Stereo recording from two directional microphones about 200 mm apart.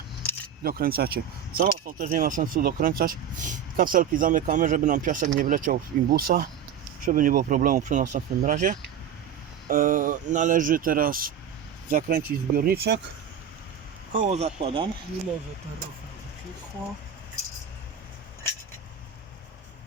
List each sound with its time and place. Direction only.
0.6 s speech: 50° right (ahead or behind)
14.1 s speech: 35° right (ahead or behind)